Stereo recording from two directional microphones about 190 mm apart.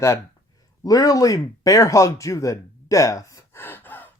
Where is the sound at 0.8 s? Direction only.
20° left (ahead or behind).